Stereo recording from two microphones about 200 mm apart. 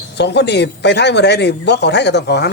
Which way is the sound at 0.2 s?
60° left (ahead or behind).